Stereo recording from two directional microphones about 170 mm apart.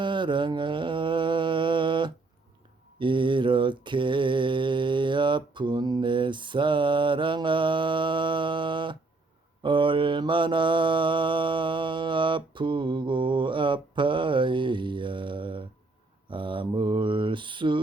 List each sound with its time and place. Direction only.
0.0 s mantra: 30° right (ahead or behind)